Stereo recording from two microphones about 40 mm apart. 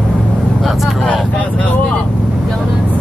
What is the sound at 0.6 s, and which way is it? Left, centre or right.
Vehicle, centre.